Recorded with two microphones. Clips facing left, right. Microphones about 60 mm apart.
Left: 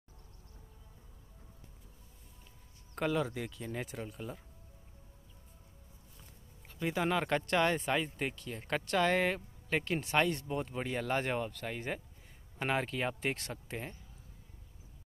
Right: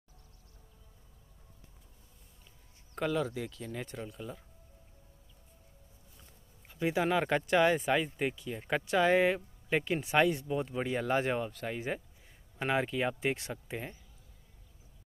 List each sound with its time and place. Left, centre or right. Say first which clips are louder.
3.0 s speech: right 1 dB; centre
6.7 s speech: right 3 dB; centre